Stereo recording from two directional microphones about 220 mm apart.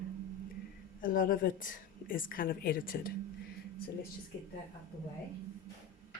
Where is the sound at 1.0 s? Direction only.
40° left (ahead or behind).